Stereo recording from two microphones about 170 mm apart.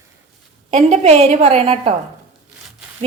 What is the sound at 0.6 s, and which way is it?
A woman's voice, 40° right (ahead or behind).